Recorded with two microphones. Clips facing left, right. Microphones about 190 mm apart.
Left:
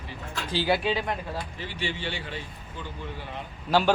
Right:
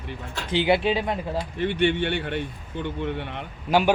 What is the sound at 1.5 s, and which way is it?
Speech, 60° right (ahead or behind).